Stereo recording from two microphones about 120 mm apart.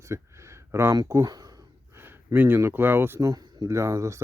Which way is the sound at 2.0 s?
15° right (ahead or behind).